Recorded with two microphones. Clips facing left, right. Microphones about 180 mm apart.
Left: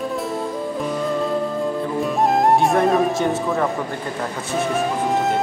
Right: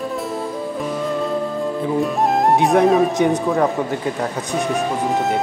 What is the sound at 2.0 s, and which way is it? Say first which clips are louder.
Music: even; centre (ahead or behind).